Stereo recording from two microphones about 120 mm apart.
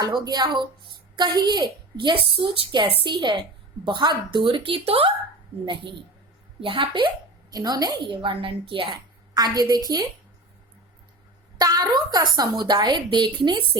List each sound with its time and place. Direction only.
0.0 s a woman's voice: 35° right (ahead or behind)
7.5 s speech: 35° right (ahead or behind)
11.5 s speech: 30° right (ahead or behind)